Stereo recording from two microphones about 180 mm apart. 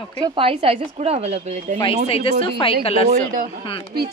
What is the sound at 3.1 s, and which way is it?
Speech, 45° right (ahead or behind).